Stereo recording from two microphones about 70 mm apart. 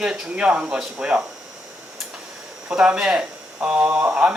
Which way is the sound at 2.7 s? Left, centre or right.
Centre.